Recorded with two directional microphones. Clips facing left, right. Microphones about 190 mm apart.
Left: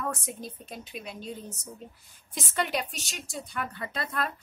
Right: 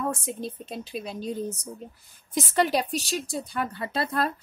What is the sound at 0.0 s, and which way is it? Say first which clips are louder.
A woman's voice: right 5 dB; 25° right (ahead or behind).